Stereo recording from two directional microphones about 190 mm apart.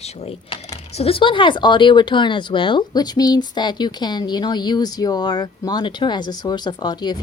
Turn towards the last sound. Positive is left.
turn(degrees=20)  # may be behind; listen again after turning